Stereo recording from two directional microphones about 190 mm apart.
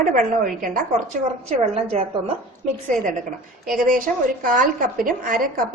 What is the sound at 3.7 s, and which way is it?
A woman's voice, 45° right (ahead or behind).